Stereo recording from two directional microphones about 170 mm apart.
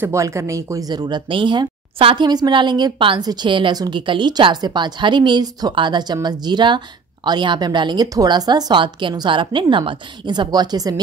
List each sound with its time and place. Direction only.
0.0 s speech: 15° right (ahead or behind)